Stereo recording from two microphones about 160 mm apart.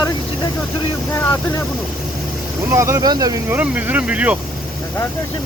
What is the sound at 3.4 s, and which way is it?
Speech, 10° right (ahead or behind).